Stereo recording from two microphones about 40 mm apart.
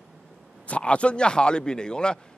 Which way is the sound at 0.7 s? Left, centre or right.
Left.